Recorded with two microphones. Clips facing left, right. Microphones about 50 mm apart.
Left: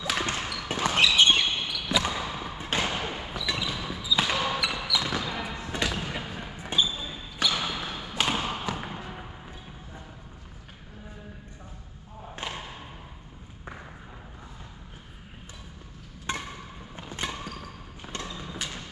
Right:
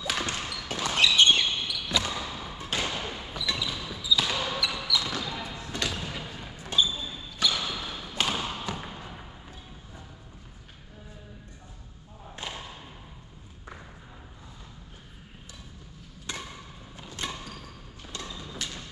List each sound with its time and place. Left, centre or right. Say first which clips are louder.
0.3 s basketball bounce: left 3 dB; left
1.0 s basketball bounce: right 1 dB; centre
8.3 s a sound: left 2 dB; left
8.6 s trickle: left 3 dB; centre
16.3 s music: left 5 dB; left
16.9 s basketball bounce: left 2 dB; left
18.2 s thump: left 1 dB; centre